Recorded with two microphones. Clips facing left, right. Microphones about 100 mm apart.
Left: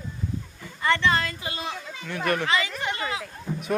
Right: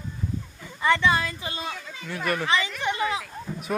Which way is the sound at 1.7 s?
15° left (ahead or behind).